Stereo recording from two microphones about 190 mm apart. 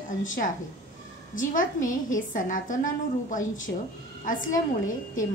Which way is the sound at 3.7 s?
55° left (ahead or behind).